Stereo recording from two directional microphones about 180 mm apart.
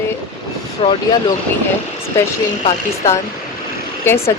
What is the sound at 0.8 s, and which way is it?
Speech, 30° left (ahead or behind).